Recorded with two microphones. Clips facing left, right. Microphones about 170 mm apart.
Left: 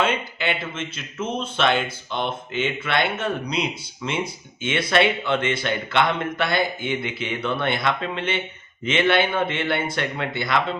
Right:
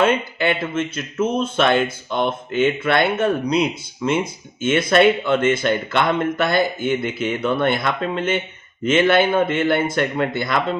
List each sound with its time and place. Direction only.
0.0 s speech: 50° right (ahead or behind)